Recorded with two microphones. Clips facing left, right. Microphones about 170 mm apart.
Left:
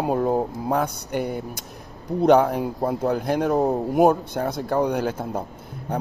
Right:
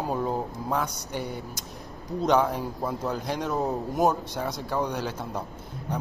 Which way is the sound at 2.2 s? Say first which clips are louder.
Left 6 dB; 60° left (ahead or behind).